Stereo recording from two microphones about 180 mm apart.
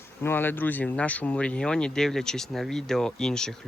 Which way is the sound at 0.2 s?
10° left (ahead or behind).